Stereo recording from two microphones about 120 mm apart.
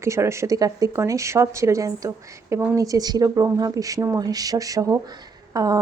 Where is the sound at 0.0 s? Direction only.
25° right (ahead or behind).